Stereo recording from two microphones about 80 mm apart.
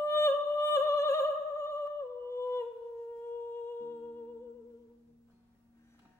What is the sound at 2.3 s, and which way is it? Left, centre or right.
Humming, left.